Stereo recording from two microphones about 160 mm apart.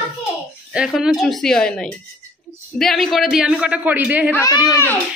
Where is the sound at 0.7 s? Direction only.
5° right (ahead or behind).